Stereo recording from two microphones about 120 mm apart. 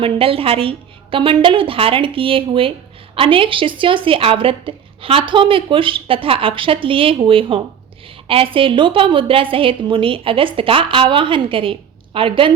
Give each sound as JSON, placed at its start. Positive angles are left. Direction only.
{"t": 0.0, "sound": "a woman's voice", "side_deg": -50}